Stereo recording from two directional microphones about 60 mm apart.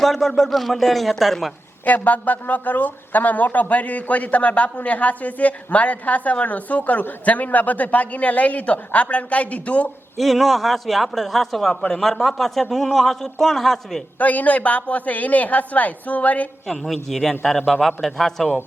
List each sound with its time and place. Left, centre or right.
0.0 s a man's voice: centre
1.8 s speech: left
10.2 s a man's voice: centre
14.2 s speech: left
16.6 s a man's voice: centre